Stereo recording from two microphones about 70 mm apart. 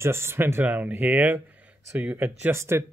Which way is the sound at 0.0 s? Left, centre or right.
Right.